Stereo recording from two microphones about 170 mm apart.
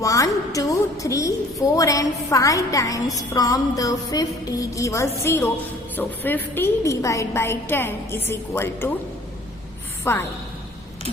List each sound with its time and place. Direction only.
0.0 s a woman's voice: 20° left (ahead or behind)
10.0 s a woman's voice: 15° left (ahead or behind)